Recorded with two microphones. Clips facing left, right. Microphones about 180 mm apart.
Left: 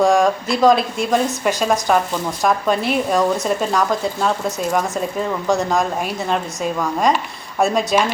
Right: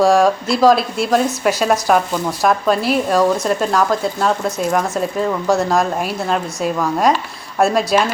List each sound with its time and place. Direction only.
0.0 s speech: centre (ahead or behind)